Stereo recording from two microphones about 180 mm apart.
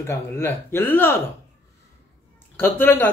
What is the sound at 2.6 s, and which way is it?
Speech, 10° left (ahead or behind).